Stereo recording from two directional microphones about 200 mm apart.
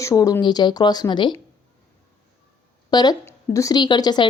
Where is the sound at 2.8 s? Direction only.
20° left (ahead or behind).